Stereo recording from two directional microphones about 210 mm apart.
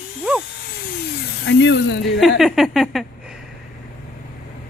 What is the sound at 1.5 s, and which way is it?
Speech, 55° left (ahead or behind).